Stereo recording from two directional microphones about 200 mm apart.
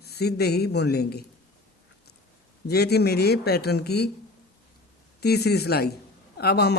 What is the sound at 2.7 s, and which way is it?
Speech, 55° left (ahead or behind).